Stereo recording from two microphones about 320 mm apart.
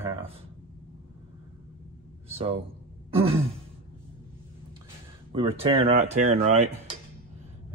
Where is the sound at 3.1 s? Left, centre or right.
Centre.